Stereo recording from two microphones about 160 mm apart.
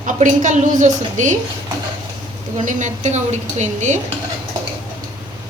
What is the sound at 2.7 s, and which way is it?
A woman's voice, 50° right (ahead or behind).